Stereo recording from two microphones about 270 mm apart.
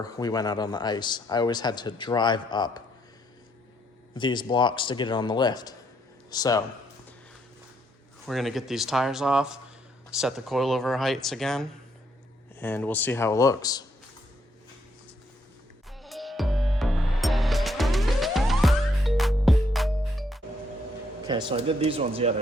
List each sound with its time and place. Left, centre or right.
0.0 s speech: centre
4.1 s speech: centre
8.3 s speech: centre
16.0 s music: centre
21.2 s speech: centre